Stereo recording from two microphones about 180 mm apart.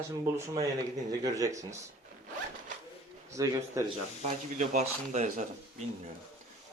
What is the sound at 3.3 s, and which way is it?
Speech, 15° right (ahead or behind).